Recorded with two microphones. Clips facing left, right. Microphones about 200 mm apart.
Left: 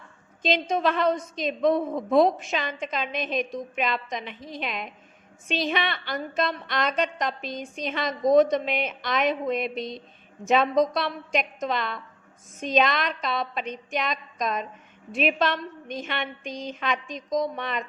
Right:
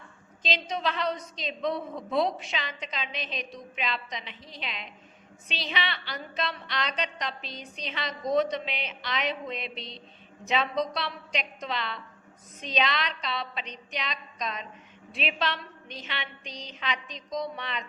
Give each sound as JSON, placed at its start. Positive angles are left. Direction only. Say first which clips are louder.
{"t": 0.4, "sound": "a woman's voice", "louder": "left 7 dB", "side_deg": 50}